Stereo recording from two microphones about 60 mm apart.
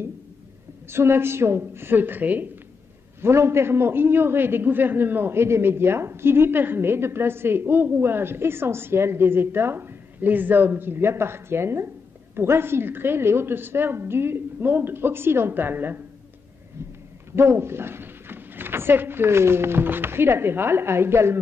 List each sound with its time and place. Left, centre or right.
0.8 s a man's voice: right
3.2 s a man's voice: right
17.4 s speech: right